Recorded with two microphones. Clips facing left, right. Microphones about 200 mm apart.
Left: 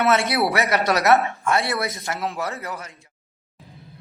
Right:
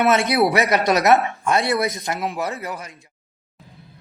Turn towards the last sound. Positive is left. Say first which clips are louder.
# right 2 dB
turn(degrees=-15)  # may be behind; listen again after turning